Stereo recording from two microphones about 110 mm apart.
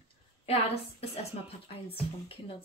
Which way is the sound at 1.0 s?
70° left (ahead or behind).